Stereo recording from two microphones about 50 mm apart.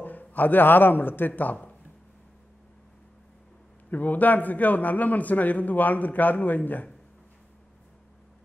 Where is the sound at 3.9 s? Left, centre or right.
Left.